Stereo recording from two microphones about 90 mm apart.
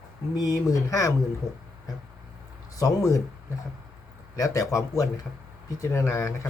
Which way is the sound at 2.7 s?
40° left (ahead or behind).